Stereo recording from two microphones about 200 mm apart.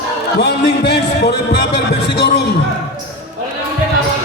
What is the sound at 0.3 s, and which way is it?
Speech, 55° left (ahead or behind).